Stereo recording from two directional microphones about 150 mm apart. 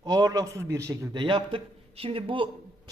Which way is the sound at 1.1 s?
30° right (ahead or behind).